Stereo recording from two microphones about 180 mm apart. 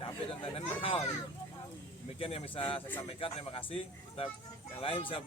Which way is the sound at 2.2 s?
30° left (ahead or behind).